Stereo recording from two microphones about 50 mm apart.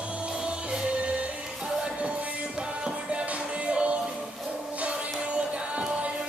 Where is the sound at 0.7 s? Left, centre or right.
Right.